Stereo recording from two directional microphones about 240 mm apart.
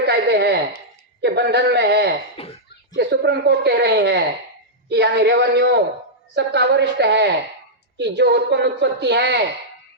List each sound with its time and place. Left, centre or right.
0.0 s a sound: right
1.2 s a man's voice: right
2.3 s speech: left
2.9 s a man's voice: right